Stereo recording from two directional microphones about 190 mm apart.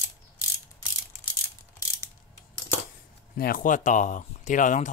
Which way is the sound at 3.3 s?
50° left (ahead or behind).